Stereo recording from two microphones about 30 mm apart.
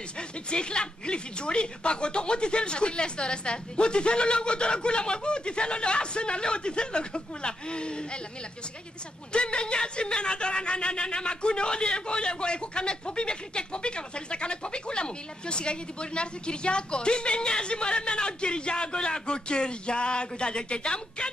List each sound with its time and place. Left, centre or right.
0.5 s speech: left
9.3 s speech: left